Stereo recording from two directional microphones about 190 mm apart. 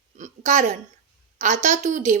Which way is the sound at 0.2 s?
40° right (ahead or behind).